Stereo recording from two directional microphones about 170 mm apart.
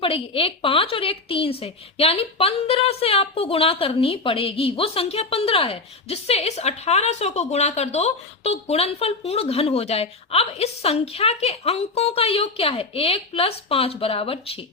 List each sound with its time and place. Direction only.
0.0 s a woman's voice: 35° left (ahead or behind)